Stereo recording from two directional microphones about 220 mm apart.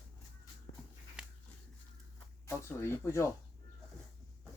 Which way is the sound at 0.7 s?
50° left (ahead or behind).